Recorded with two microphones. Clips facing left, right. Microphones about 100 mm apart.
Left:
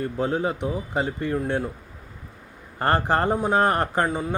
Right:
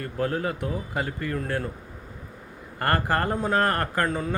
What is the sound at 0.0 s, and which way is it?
Speech, 20° left (ahead or behind).